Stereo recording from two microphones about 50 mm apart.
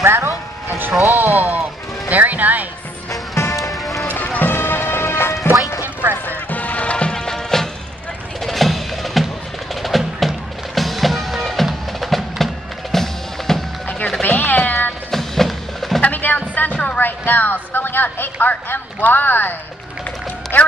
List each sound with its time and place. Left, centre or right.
0.0 s speech: right
1.0 s speech: right
3.3 s music: left
4.1 s music: left
6.2 s music: left
7.2 s music: centre
12.9 s drum kit: centre
14.2 s cat: left
15.0 s percussion: centre
16.0 s a sound: left
16.7 s music: left
17.0 s speech: left
20.5 s music: left